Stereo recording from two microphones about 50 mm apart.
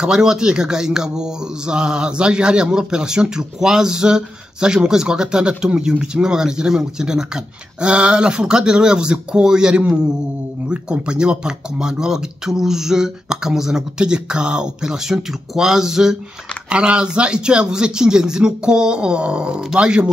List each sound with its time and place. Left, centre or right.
0.0 s speech: centre